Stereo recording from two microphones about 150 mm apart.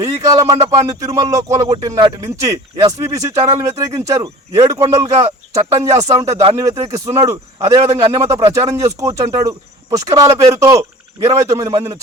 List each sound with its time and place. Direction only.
0.0 s speech: 25° right (ahead or behind)